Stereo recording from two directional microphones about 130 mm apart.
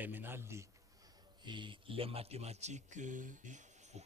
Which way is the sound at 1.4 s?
40° right (ahead or behind).